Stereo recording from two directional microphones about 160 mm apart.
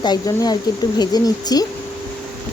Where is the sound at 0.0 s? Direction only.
25° left (ahead or behind).